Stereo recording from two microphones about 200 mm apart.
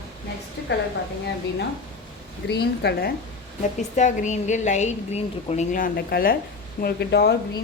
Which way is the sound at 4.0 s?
40° left (ahead or behind).